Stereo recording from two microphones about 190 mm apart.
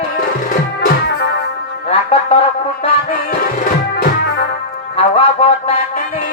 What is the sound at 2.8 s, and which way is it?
Music, 45° left (ahead or behind).